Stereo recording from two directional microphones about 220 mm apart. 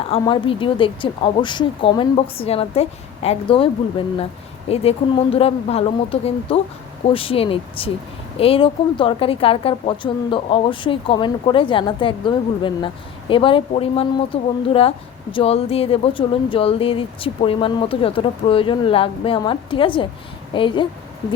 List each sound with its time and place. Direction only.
0.0 s a woman's voice: 25° left (ahead or behind)